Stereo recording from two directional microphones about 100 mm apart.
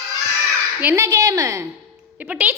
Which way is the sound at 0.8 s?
20° right (ahead or behind).